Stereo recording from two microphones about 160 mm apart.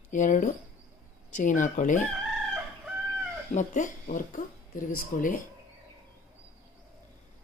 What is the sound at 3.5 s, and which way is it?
A woman's voice, 50° left (ahead or behind).